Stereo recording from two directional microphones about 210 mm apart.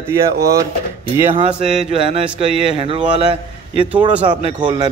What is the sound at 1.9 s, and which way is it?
Speech, 25° right (ahead or behind).